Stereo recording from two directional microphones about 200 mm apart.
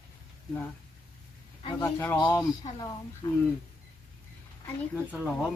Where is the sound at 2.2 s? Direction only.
25° left (ahead or behind).